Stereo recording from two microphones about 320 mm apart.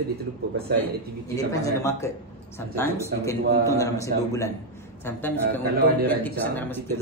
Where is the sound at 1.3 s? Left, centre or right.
Centre.